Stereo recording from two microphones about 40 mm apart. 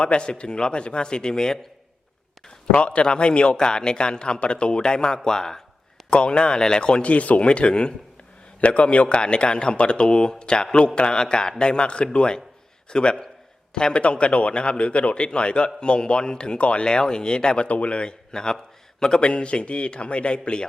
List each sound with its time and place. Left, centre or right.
0.0 s speech: left
2.7 s speech: left
6.1 s speech: left
7.1 s speech: left
17.7 s a man's voice: left